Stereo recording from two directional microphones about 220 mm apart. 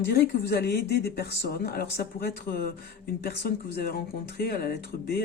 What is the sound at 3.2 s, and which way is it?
Speech, 45° left (ahead or behind).